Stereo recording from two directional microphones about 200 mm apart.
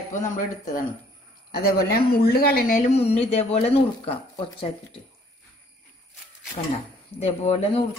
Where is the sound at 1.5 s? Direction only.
50° left (ahead or behind).